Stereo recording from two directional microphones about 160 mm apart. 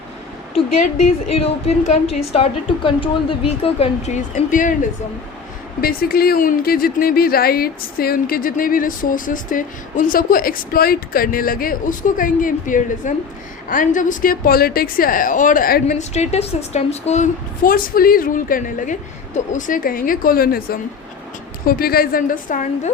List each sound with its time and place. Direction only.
1.3 s a woman's voice: 40° left (ahead or behind)
5.8 s speech: 70° left (ahead or behind)
16.0 s a woman's voice: 45° left (ahead or behind)
17.6 s speech: 60° left (ahead or behind)